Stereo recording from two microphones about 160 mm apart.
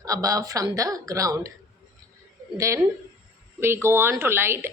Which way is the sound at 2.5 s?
20° right (ahead or behind).